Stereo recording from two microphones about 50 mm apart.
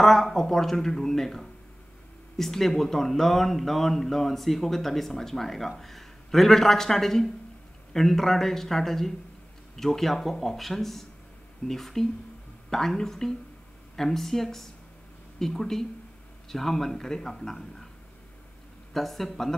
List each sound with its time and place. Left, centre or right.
0.0 s a man's voice: centre
18.9 s speech: centre